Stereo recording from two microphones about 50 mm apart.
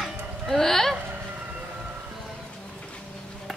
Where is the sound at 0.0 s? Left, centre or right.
Centre.